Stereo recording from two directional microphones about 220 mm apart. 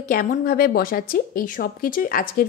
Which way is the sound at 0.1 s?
40° left (ahead or behind).